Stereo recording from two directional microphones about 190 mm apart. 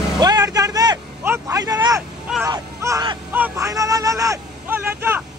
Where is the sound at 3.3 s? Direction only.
10° right (ahead or behind).